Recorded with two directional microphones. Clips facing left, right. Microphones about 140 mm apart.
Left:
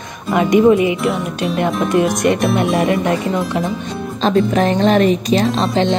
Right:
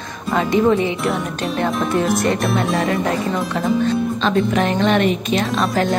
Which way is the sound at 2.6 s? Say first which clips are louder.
Left 4 dB; 25° left (ahead or behind).